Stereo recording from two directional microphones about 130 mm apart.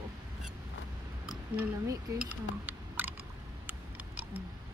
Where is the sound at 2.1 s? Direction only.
10° right (ahead or behind).